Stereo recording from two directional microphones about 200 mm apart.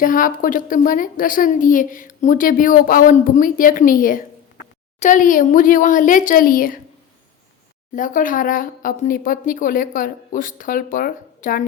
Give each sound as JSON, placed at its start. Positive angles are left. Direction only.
{"t": 0.0, "sound": "a woman's voice", "side_deg": 40}
{"t": 7.9, "sound": "a woman's voice", "side_deg": 40}